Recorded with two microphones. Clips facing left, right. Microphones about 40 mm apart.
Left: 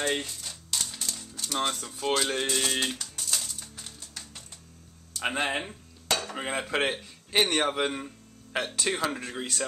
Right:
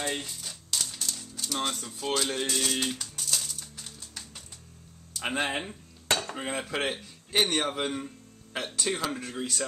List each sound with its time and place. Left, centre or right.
0.0 s speech: left
0.3 s typewriter: centre
4.1 s music: centre
5.1 s speech: centre
6.3 s speech: centre